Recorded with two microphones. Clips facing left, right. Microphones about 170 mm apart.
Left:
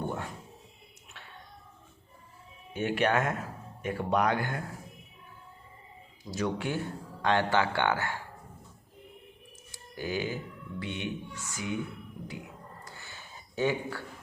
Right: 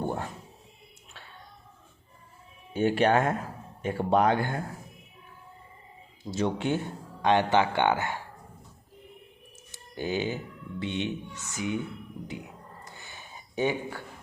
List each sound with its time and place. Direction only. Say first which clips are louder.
0.0 s music: right 3 dB; 30° right (ahead or behind)
2.7 s speech: right 4 dB; 30° right (ahead or behind)
6.3 s speech: right 4 dB; 25° right (ahead or behind)
9.7 s music: right 3 dB; 25° right (ahead or behind)
10.8 s speech: right 4 dB; 25° right (ahead or behind)
12.8 s a sound: right 1 dB; 20° right (ahead or behind)